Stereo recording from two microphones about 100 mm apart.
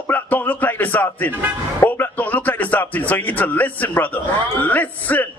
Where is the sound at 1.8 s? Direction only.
20° left (ahead or behind).